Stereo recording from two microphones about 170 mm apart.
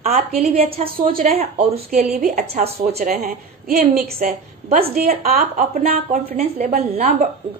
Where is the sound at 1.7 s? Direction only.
65° right (ahead or behind).